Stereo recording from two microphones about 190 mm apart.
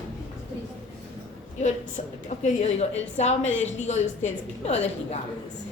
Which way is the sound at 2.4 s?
35° left (ahead or behind).